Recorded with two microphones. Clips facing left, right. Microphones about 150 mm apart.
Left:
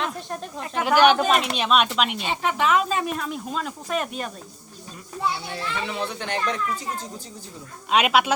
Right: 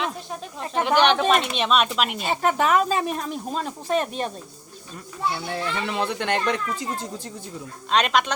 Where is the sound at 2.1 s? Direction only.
40° right (ahead or behind).